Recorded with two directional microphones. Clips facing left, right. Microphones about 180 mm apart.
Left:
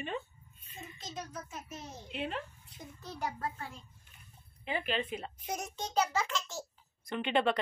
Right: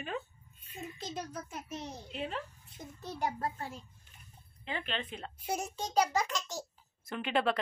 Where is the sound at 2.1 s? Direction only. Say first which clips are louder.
Left 1 dB; centre (ahead or behind).